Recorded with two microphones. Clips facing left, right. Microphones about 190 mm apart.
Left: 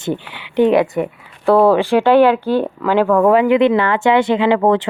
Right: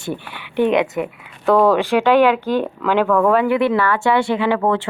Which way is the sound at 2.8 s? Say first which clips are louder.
Left 3 dB; 10° left (ahead or behind).